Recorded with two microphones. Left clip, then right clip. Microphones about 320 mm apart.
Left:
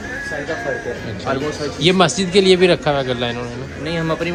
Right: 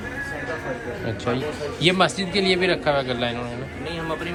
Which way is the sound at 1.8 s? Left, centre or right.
Centre.